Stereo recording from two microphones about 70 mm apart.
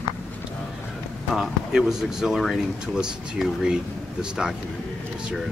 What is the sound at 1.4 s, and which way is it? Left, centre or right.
Speech, centre.